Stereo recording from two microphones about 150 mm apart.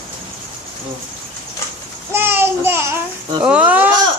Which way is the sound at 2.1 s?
15° right (ahead or behind).